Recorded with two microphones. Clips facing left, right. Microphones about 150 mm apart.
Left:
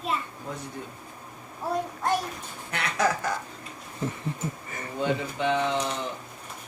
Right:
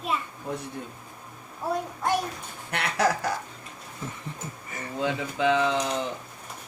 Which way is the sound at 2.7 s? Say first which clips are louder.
Right 1 dB; 65° right (ahead or behind).